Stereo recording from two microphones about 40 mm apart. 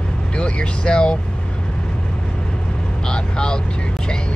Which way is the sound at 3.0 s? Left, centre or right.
Left.